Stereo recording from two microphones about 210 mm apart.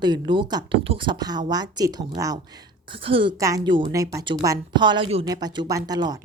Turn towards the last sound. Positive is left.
turn(degrees=-20)  # may be behind; listen again after turning